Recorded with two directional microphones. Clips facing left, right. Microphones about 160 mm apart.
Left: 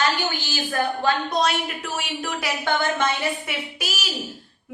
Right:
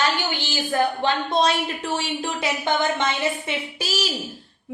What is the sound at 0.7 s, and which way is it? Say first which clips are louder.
A woman's voice: right 1 dB; 25° right (ahead or behind).